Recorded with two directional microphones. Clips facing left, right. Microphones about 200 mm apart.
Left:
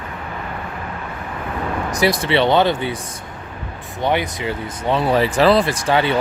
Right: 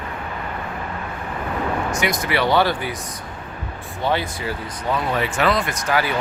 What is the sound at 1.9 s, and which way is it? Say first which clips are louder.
Speech: left 5 dB; 35° left (ahead or behind).